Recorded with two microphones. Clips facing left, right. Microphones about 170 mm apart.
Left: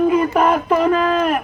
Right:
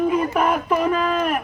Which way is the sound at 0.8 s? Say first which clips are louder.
Left 4 dB; 70° left (ahead or behind).